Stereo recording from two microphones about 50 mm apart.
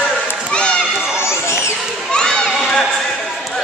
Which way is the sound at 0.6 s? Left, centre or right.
Left.